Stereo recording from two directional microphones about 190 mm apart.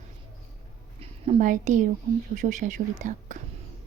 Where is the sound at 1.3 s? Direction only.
40° right (ahead or behind).